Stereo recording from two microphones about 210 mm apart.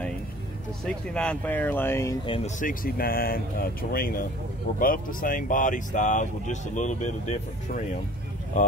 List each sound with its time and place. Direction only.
0.8 s speech: 5° left (ahead or behind)
2.2 s speech: 25° left (ahead or behind)
2.6 s speech: 40° left (ahead or behind)